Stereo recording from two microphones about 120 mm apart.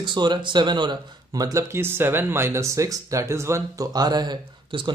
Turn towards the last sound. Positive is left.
turn(degrees=-40)  # may be behind; listen again after turning